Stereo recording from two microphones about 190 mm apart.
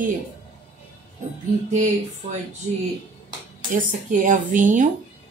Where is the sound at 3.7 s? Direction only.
45° right (ahead or behind).